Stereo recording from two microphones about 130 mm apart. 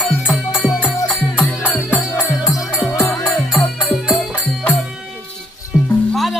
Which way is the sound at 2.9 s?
20° left (ahead or behind).